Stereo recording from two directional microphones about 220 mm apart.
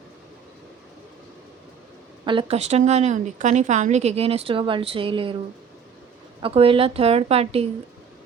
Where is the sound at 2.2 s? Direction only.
25° right (ahead or behind).